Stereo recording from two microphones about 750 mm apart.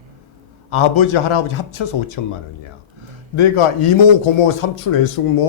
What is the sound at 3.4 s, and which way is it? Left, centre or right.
Speech, left.